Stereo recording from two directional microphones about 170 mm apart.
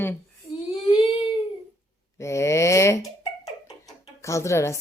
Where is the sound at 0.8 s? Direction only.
35° left (ahead or behind).